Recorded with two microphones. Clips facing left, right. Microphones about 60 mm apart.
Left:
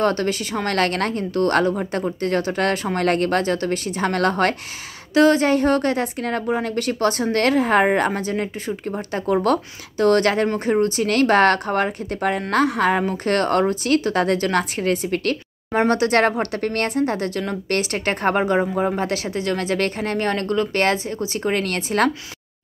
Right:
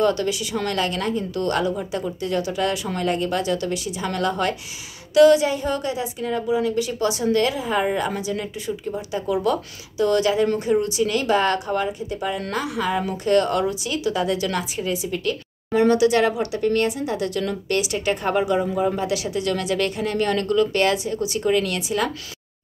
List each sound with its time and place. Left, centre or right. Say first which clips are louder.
0.0 s speech: even; left
3.1 s speech: left 3 dB; left
5.1 s a woman's voice: right 2 dB; left
5.5 s a woman's voice: left 6 dB; left